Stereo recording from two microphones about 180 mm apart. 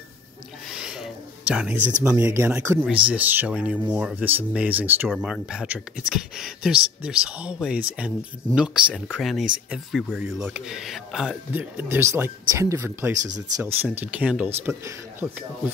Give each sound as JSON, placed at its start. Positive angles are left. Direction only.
{"t": 0.7, "sound": "a sound", "side_deg": -5}
{"t": 2.0, "sound": "speech", "side_deg": -15}
{"t": 13.2, "sound": "speech", "side_deg": -40}
{"t": 13.6, "sound": "speech", "side_deg": -10}